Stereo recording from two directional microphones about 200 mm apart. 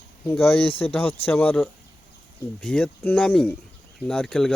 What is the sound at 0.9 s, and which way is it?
Speech, 10° left (ahead or behind).